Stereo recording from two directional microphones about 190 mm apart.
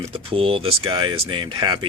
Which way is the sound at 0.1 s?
30° right (ahead or behind).